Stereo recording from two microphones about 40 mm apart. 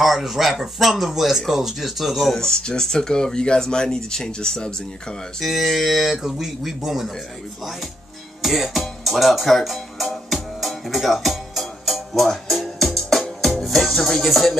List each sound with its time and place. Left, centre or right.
0.0 s speech: centre
2.3 s speech: centre
5.4 s a man's voice: centre
8.4 s music: centre